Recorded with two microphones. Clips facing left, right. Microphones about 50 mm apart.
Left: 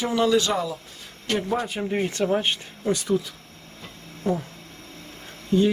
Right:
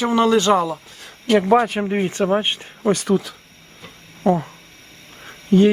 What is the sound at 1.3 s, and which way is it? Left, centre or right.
Speech, right.